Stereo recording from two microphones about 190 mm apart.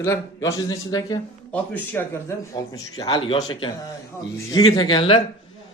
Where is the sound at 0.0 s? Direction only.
15° left (ahead or behind).